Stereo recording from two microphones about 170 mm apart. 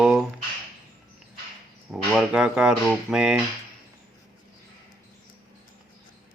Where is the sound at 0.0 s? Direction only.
5° right (ahead or behind).